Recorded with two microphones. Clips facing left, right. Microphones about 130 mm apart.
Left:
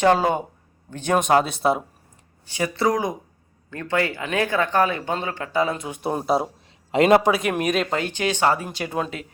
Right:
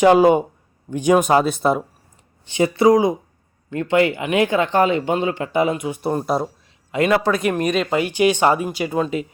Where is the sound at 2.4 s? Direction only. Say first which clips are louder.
Right 7 dB; 20° right (ahead or behind).